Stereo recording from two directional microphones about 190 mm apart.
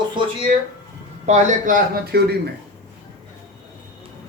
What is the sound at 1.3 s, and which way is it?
Speech, 40° right (ahead or behind).